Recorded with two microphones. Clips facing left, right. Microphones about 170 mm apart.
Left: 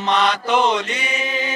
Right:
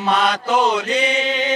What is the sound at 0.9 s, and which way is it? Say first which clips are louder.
Chant: right 6 dB; 75° right (ahead or behind).